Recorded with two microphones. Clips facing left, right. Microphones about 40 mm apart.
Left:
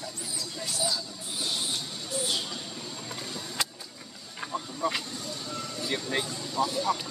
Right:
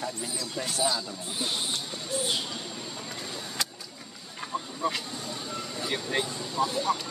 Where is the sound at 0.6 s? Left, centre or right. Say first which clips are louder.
Right 4 dB; right.